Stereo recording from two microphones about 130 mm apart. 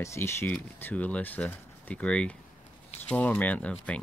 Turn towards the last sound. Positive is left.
turn(degrees=10)  # may be behind; listen again after turning